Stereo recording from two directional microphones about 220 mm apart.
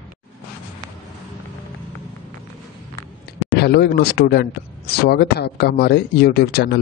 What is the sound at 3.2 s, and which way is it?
A man's voice, 50° left (ahead or behind).